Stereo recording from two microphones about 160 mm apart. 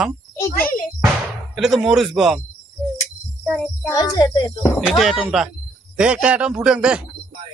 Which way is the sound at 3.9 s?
25° left (ahead or behind).